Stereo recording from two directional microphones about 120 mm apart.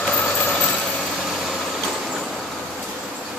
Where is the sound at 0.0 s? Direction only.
5° left (ahead or behind).